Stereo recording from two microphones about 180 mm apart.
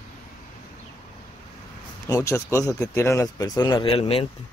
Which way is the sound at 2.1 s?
15° left (ahead or behind).